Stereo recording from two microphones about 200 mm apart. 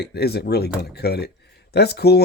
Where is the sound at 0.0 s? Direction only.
55° left (ahead or behind).